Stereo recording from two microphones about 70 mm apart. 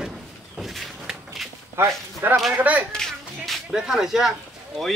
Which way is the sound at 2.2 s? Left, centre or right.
Right.